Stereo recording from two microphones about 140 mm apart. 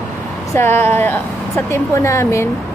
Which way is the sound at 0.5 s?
15° left (ahead or behind).